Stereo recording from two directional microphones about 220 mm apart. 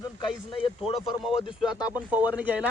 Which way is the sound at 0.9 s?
Centre (ahead or behind).